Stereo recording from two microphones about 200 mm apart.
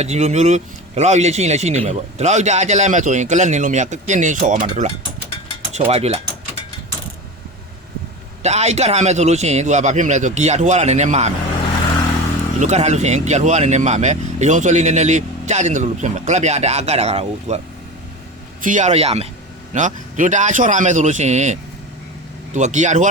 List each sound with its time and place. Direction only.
0.0 s speech: 35° right (ahead or behind)
8.4 s speech: 35° right (ahead or behind)
12.5 s speech: 35° right (ahead or behind)
18.6 s speech: 40° right (ahead or behind)